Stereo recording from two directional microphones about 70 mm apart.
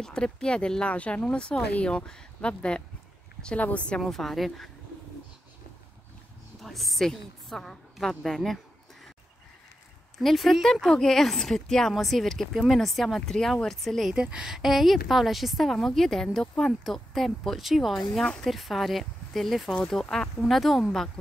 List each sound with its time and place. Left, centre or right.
0.0 s speech: centre
4.0 s a woman's voice: centre
6.6 s a woman's voice: centre
10.1 s a woman's voice: centre
14.1 s a woman's voice: centre